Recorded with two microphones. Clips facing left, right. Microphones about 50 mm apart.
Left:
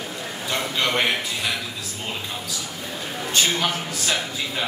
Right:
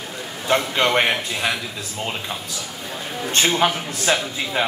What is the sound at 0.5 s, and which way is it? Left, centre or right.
A man's voice, right.